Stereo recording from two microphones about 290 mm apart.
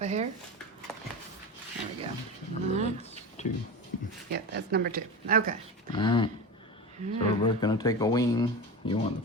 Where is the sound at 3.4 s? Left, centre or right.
Left.